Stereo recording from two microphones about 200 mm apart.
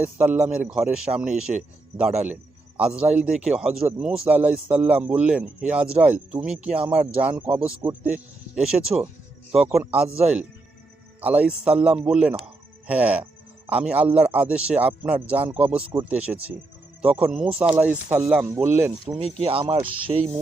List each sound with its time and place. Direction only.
0.0 s a man's voice: 5° right (ahead or behind)
11.2 s a man's voice: 5° right (ahead or behind)
19.4 s speech: 25° right (ahead or behind)